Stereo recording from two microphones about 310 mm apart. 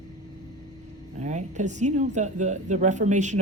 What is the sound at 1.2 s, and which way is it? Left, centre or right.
Speech, right.